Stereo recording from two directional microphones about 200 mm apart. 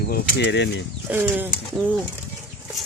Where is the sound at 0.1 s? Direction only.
60° left (ahead or behind).